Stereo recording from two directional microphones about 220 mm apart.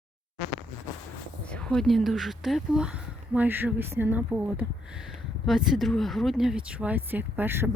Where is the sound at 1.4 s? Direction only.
5° left (ahead or behind).